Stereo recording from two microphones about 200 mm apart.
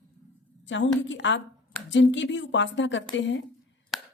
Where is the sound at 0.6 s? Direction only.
65° left (ahead or behind).